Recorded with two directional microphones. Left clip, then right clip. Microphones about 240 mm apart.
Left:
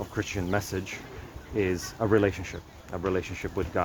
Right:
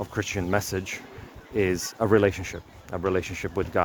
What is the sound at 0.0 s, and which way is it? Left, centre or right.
Speech, right.